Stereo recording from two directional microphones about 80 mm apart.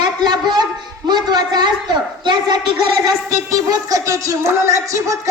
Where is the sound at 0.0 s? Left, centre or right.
Right.